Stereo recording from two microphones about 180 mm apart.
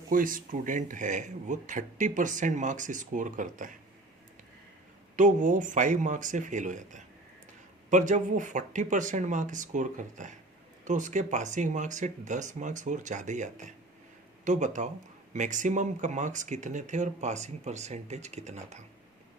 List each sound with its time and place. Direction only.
0.1 s speech: 50° right (ahead or behind)
5.1 s speech: 45° right (ahead or behind)